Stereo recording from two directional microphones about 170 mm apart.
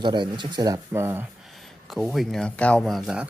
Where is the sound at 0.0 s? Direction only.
25° right (ahead or behind).